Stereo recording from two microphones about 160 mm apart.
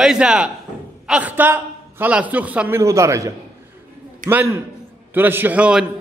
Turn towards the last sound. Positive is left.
turn(degrees=-10)  # may be behind; listen again after turning